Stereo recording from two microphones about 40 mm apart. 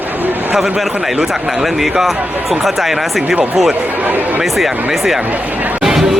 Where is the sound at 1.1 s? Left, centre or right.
Centre.